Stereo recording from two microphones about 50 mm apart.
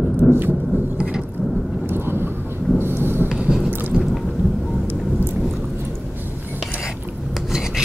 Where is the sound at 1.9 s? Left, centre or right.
Right.